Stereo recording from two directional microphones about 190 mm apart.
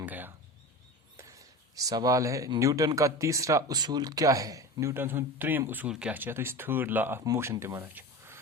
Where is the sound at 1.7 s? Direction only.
20° right (ahead or behind).